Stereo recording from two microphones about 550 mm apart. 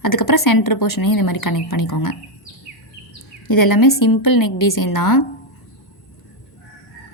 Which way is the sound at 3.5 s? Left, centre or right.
Left.